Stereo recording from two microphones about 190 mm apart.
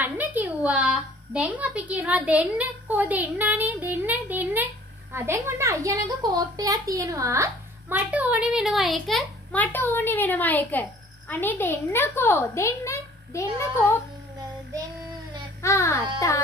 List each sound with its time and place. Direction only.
0.0 s a woman's voice: 10° right (ahead or behind); by 13.9 s 15° left (ahead or behind)
15.6 s a child's voice: 15° left (ahead or behind)